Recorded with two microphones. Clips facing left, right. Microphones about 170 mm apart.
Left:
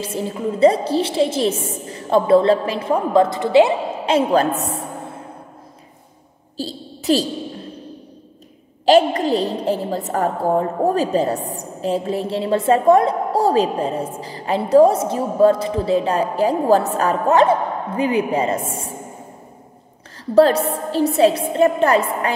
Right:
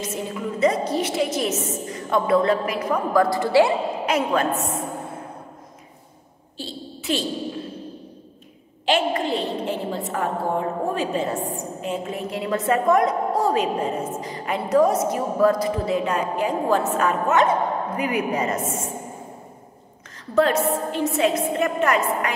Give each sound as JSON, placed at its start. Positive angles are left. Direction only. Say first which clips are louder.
{"t": 0.0, "sound": "a woman's voice", "louder": "left 5 dB", "side_deg": 30}
{"t": 6.5, "sound": "a sound", "louder": "left 5 dB", "side_deg": 40}
{"t": 8.8, "sound": "a woman's voice", "louder": "left 8 dB", "side_deg": 40}
{"t": 20.3, "sound": "a woman's voice", "louder": "left 5 dB", "side_deg": 35}